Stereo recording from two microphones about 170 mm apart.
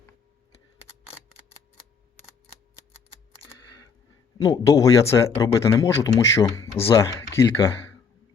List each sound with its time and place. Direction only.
4.4 s a man's voice: 20° left (ahead or behind)